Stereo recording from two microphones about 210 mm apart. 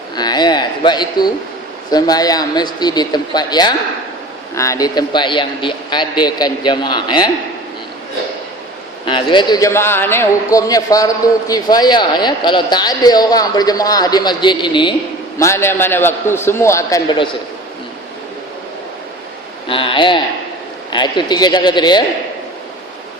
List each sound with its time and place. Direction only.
0.2 s a man's voice: 20° left (ahead or behind)
9.0 s a man's voice: 20° left (ahead or behind)
15.4 s a man's voice: 10° left (ahead or behind)
19.6 s a man's voice: 25° left (ahead or behind)